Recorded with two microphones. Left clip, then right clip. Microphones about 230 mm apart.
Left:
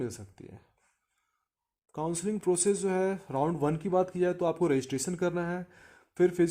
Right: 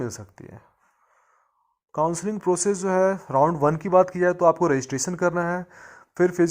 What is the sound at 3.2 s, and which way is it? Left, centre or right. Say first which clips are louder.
Speech: right 10 dB; centre.